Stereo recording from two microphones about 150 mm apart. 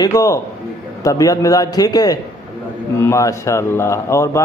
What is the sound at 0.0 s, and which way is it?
A man's voice, 25° left (ahead or behind).